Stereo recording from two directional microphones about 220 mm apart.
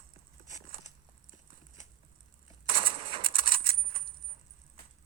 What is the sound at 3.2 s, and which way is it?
Bicycle bell, 40° right (ahead or behind).